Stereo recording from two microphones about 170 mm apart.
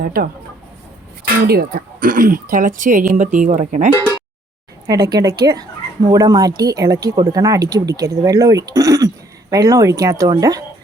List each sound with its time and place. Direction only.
0.0 s speech: 60° right (ahead or behind)
1.5 s speech: 65° right (ahead or behind); by 3.8 s 45° right (ahead or behind)
4.9 s speech: 25° right (ahead or behind)